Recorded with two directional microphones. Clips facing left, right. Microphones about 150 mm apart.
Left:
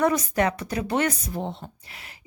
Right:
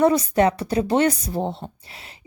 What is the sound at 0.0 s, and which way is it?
A woman's voice, 30° right (ahead or behind).